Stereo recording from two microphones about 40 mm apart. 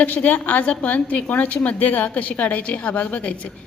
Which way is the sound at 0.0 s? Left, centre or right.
Left.